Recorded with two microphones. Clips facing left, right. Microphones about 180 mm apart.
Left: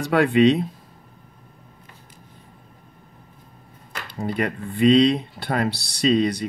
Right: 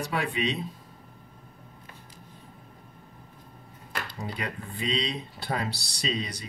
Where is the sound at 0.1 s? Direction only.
70° left (ahead or behind).